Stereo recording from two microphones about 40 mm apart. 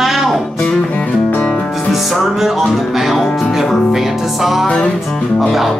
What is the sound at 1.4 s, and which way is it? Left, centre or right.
Music, centre.